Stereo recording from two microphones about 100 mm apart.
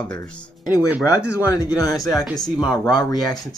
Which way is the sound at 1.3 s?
35° left (ahead or behind).